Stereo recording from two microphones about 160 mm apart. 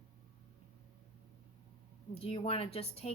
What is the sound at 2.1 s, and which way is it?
A woman's voice, 35° left (ahead or behind).